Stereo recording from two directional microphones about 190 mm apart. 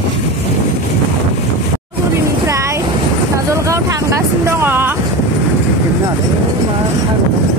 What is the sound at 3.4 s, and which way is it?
Vehicle, 15° right (ahead or behind).